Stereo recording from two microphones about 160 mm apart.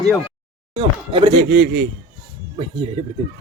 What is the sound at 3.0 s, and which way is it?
Speech, 35° right (ahead or behind).